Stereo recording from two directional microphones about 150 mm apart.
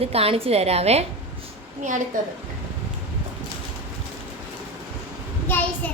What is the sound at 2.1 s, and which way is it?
Speech, 60° right (ahead or behind).